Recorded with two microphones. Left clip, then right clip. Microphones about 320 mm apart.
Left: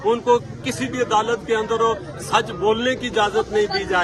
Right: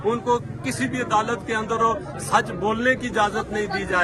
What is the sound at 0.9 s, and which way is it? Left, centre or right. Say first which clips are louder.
Speech: left 4 dB; centre.